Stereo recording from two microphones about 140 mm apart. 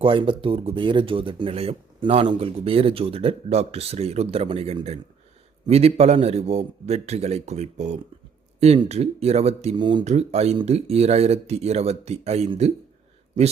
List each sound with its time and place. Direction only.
0.0 s speech: 40° right (ahead or behind)
9.7 s speech: 35° right (ahead or behind)
10.0 s speech: 50° right (ahead or behind)